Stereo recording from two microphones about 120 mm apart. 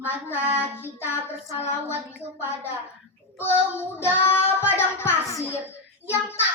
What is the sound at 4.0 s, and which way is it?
A child's voice, 20° left (ahead or behind).